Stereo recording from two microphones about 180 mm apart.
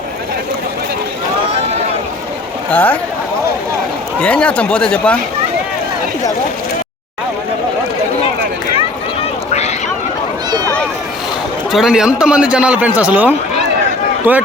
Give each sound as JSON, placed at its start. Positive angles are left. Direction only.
{"t": 2.7, "sound": "speech", "side_deg": 10}
{"t": 4.2, "sound": "speech", "side_deg": 5}
{"t": 9.5, "sound": "a sound", "side_deg": 35}
{"t": 11.7, "sound": "a man's voice", "side_deg": 0}